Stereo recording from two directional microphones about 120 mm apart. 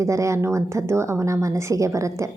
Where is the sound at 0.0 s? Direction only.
25° right (ahead or behind).